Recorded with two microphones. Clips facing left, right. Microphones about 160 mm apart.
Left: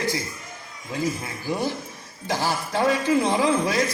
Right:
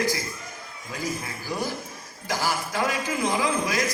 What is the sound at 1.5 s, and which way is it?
A man's voice, 25° left (ahead or behind).